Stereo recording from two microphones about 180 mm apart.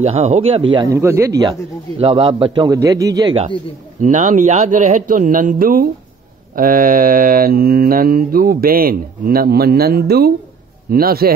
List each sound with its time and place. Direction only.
0.0 s speech: 35° right (ahead or behind)
0.7 s speech: 15° right (ahead or behind)
1.4 s a man's voice: 30° right (ahead or behind)
4.0 s speech: 45° right (ahead or behind)
6.5 s mantra: 50° right (ahead or behind)